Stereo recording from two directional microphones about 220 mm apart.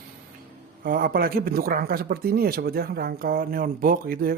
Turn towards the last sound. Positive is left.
turn(degrees=-40)  # may be behind; listen again after turning